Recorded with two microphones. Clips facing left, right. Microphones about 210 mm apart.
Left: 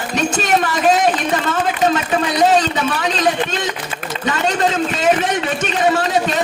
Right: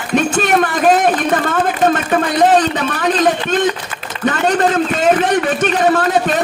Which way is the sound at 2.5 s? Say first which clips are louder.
Right 2 dB; 50° right (ahead or behind).